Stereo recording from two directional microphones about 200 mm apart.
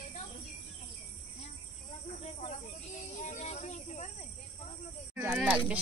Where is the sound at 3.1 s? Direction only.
40° left (ahead or behind).